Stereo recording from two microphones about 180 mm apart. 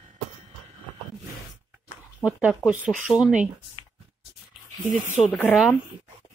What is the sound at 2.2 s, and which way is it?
Speech, 5° right (ahead or behind).